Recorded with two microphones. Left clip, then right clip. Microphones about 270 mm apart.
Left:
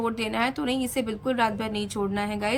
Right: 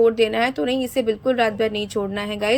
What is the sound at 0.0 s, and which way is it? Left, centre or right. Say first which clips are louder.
Speech: right 9 dB; centre.